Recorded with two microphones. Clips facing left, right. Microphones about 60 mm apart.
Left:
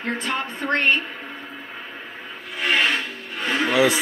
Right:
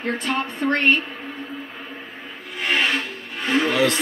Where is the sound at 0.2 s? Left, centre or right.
Left.